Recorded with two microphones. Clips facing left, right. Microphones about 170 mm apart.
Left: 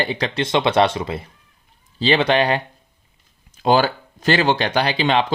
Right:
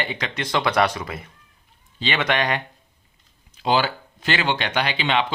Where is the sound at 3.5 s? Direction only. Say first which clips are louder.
Left 5 dB; 45° left (ahead or behind).